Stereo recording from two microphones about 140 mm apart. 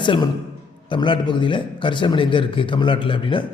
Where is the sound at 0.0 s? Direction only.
35° left (ahead or behind).